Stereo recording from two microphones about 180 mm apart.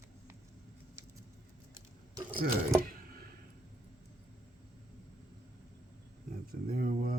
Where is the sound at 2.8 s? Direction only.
55° right (ahead or behind).